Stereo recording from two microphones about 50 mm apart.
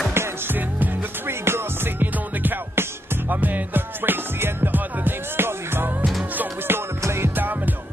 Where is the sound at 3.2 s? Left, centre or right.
Right.